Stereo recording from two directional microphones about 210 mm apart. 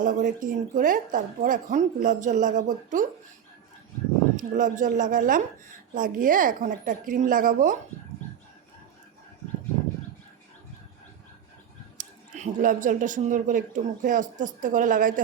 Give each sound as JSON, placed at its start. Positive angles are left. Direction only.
{"t": 0.0, "sound": "speech", "side_deg": -40}
{"t": 4.4, "sound": "speech", "side_deg": -40}
{"t": 11.9, "sound": "speech", "side_deg": -35}